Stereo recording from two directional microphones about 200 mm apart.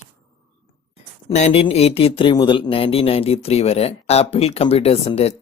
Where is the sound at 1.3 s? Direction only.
35° left (ahead or behind).